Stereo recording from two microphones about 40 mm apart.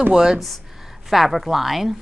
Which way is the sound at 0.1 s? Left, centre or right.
Centre.